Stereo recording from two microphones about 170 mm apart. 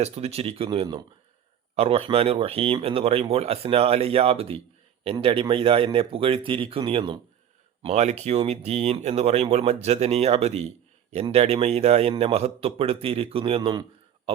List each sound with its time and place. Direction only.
0.0 s speech: 35° right (ahead or behind)
7.8 s speech: 40° right (ahead or behind)